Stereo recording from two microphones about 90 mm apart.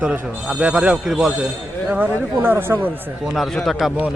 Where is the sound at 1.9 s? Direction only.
20° right (ahead or behind).